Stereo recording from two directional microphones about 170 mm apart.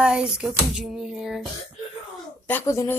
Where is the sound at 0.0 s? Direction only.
5° right (ahead or behind).